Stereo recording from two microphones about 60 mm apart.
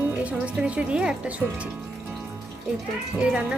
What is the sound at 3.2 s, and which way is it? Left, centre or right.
Speech, centre.